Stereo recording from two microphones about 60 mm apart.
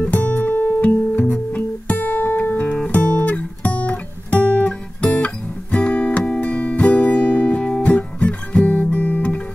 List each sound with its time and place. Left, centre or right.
0.0 s music: left
8.8 s guitar: left